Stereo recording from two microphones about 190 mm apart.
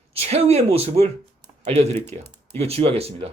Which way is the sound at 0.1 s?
30° right (ahead or behind).